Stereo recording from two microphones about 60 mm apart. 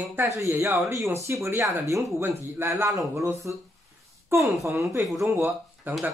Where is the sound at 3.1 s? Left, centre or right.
Right.